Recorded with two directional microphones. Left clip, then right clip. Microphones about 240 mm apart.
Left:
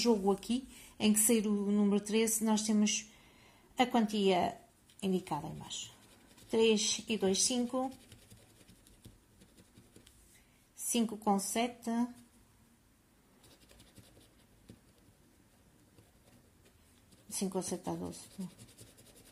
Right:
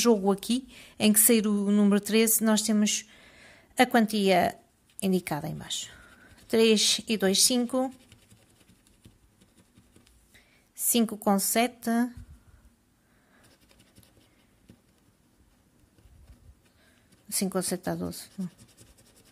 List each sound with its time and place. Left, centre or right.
0.0 s a woman's voice: right
10.9 s a woman's voice: right
17.5 s a woman's voice: right